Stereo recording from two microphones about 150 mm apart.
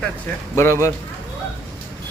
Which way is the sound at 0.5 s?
15° left (ahead or behind).